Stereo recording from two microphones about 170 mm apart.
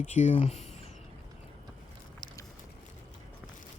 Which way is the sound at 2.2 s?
25° left (ahead or behind).